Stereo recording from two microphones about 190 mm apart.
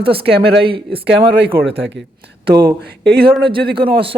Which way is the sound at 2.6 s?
55° right (ahead or behind).